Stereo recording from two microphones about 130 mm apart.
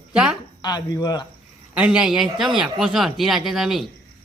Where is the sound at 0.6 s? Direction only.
30° left (ahead or behind).